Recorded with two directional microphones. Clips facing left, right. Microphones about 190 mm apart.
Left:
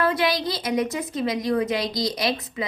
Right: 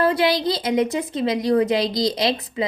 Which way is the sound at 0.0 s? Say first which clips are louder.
Right 4 dB; 30° right (ahead or behind).